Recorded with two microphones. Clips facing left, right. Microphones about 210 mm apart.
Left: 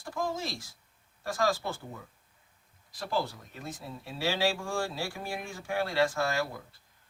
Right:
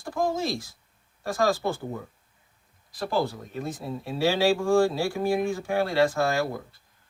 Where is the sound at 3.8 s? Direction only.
55° right (ahead or behind).